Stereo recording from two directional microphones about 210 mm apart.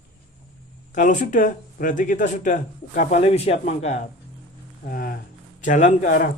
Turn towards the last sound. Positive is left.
turn(degrees=40)  # may be behind; listen again after turning